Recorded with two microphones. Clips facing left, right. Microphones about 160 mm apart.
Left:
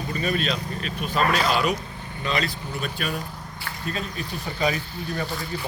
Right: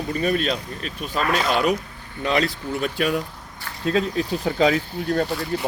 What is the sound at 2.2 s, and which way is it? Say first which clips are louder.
Speech: right 5 dB; 70° right (ahead or behind).